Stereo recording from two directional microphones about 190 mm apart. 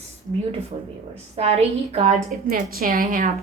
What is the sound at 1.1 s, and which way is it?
Speech, 30° right (ahead or behind).